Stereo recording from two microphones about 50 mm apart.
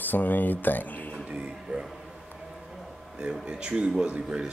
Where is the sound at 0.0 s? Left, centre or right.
Left.